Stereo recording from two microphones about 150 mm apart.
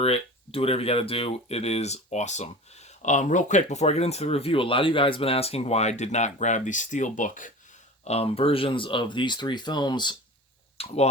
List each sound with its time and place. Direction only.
0.0 s speech: 40° left (ahead or behind); by 7.5 s 60° left (ahead or behind)
8.0 s speech: 40° left (ahead or behind)
10.8 s speech: 45° left (ahead or behind)